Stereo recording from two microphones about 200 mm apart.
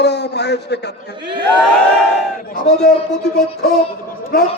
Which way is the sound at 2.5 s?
45° left (ahead or behind).